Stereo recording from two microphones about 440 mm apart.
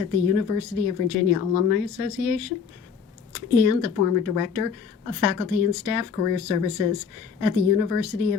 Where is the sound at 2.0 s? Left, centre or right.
Left.